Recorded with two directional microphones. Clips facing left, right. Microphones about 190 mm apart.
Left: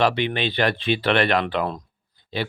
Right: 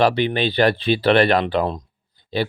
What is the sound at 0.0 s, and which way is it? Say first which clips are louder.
Speech: right 3 dB; 35° right (ahead or behind).